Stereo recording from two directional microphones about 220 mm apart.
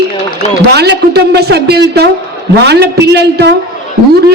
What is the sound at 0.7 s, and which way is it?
A man's voice, 50° right (ahead or behind).